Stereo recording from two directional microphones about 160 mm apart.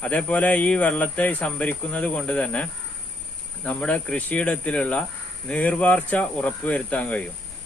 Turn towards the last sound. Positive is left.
turn(degrees=10)  # may be behind; listen again after turning